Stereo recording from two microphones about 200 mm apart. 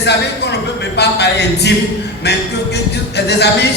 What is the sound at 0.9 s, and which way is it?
Speech, 55° left (ahead or behind).